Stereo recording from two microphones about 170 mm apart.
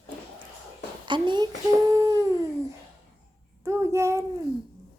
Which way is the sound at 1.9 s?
20° right (ahead or behind).